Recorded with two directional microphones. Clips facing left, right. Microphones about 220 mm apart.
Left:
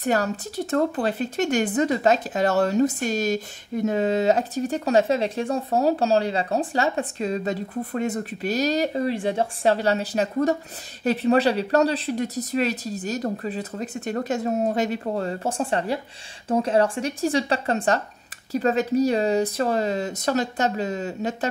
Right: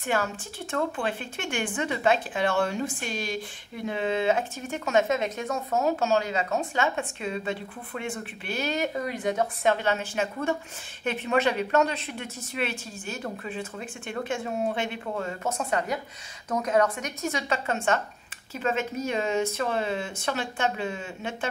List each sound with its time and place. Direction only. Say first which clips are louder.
0.0 s speech: left 5 dB; 40° left (ahead or behind)